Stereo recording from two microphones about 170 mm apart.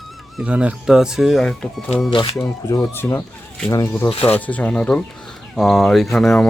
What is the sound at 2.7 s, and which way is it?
Speech, 15° left (ahead or behind).